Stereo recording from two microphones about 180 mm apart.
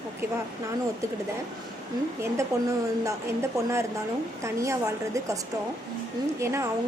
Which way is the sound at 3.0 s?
15° right (ahead or behind).